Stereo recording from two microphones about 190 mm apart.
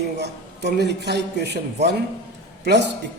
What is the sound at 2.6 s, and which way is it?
Speech, 60° right (ahead or behind).